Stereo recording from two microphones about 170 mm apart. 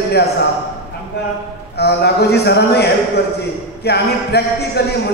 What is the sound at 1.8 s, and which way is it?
Speech, 75° left (ahead or behind).